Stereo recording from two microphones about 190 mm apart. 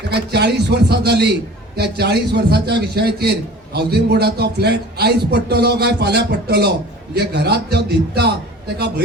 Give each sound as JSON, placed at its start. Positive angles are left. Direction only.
{"t": 0.1, "sound": "a man's voice", "side_deg": -60}